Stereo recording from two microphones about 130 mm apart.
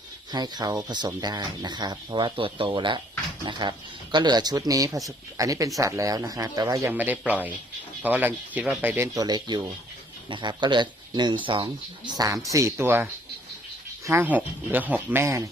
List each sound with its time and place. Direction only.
0.3 s speech: 35° right (ahead or behind)
6.9 s speech: 15° right (ahead or behind)
9.1 s speech: 30° right (ahead or behind)